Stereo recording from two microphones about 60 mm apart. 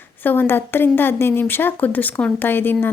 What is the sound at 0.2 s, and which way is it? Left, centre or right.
Speech, left.